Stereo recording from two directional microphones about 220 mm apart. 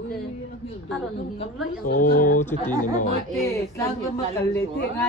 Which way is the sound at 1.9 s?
35° left (ahead or behind).